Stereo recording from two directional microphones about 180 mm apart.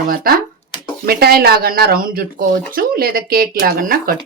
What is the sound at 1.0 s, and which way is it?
Speech, 60° right (ahead or behind).